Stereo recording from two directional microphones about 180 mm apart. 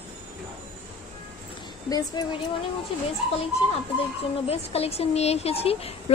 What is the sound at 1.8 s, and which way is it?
Speech, 20° left (ahead or behind).